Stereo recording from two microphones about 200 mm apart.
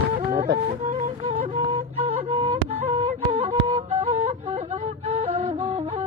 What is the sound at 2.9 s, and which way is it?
Music, 35° right (ahead or behind).